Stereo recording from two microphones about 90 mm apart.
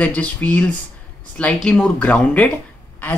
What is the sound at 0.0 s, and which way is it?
Speech, 15° left (ahead or behind).